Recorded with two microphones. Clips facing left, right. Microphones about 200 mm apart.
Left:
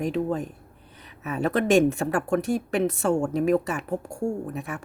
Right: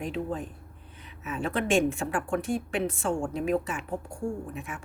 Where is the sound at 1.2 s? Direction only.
40° left (ahead or behind).